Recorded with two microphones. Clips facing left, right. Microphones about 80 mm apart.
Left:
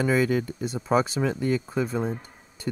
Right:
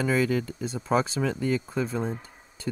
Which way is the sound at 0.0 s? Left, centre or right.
Centre.